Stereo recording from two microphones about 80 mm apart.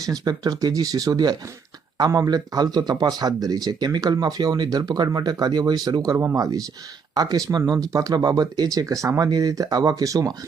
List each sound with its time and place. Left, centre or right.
0.0 s speech: right